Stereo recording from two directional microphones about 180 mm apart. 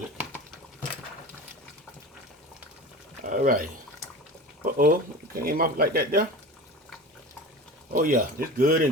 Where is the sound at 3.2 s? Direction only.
45° right (ahead or behind).